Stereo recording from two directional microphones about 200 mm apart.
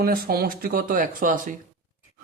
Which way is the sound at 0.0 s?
50° right (ahead or behind).